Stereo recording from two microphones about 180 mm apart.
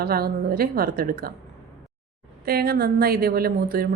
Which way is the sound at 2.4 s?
60° right (ahead or behind).